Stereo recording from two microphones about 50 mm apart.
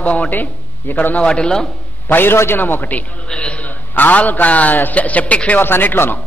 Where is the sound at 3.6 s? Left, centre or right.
Left.